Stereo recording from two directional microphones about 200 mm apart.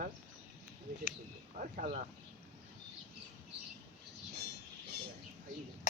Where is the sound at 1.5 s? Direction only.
40° right (ahead or behind).